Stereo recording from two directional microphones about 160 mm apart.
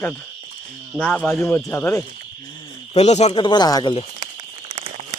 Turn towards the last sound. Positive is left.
turn(degrees=-40)  # may be behind; listen again after turning